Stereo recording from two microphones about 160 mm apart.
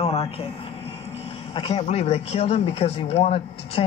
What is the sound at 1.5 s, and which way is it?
Speech, 35° left (ahead or behind).